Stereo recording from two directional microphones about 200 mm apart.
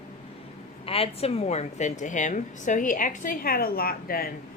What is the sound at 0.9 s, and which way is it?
A woman's voice, 30° left (ahead or behind).